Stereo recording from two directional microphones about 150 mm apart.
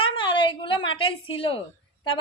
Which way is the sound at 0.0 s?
35° left (ahead or behind).